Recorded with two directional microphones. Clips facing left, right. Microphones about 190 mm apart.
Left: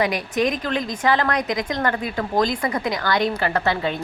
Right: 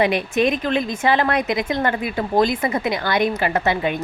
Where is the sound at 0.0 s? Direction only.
25° right (ahead or behind).